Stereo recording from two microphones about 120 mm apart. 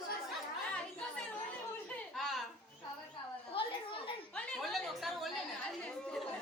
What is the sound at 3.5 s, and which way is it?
Children playing, 45° left (ahead or behind).